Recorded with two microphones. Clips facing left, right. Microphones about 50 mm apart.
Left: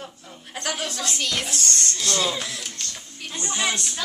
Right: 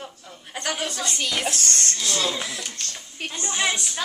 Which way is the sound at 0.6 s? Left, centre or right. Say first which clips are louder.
Right 1 dB; centre.